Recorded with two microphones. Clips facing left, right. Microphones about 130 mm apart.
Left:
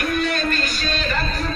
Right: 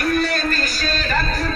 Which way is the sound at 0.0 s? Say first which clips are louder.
Right 2 dB; 40° right (ahead or behind).